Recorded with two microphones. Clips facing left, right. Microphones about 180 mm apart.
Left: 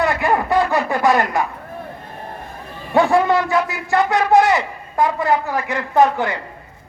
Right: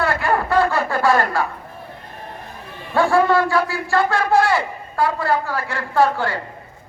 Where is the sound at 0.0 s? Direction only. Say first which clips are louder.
Left 2 dB; 15° left (ahead or behind).